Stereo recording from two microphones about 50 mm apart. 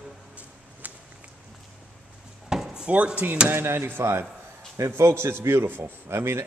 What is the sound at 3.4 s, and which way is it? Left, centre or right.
Speech, right.